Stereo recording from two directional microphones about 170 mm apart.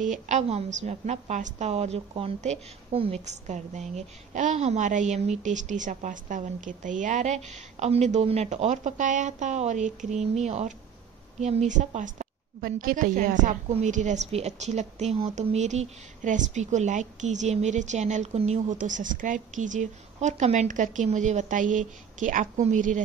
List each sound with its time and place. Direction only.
0.0 s a woman's voice: 45° right (ahead or behind)